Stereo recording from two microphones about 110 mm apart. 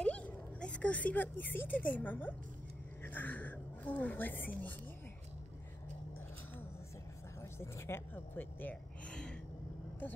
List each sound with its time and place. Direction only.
0.0 s speech: 10° left (ahead or behind)
3.0 s a sound: 15° left (ahead or behind)
7.5 s speech: 25° left (ahead or behind); by 9.4 s 10° left (ahead or behind)